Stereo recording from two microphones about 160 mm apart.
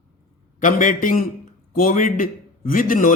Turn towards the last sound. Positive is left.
turn(degrees=55)  # may be behind; listen again after turning